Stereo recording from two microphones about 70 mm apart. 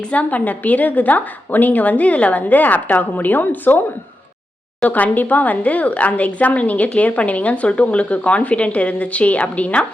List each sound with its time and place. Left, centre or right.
0.1 s speech: left
4.9 s speech: left